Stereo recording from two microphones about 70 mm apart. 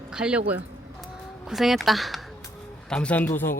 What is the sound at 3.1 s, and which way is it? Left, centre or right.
Speech, left.